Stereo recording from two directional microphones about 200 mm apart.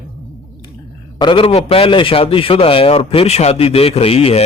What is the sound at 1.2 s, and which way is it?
A man's voice, 25° left (ahead or behind).